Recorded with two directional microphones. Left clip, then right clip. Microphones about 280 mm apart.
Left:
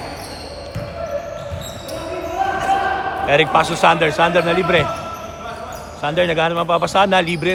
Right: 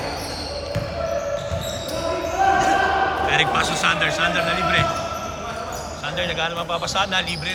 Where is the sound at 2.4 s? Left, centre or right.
Centre.